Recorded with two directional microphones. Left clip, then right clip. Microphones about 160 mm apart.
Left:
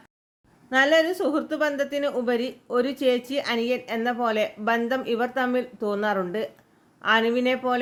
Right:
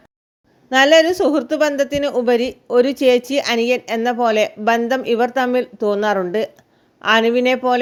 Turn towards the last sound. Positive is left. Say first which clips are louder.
# right 8 dB
turn(degrees=-45)  # may be behind; listen again after turning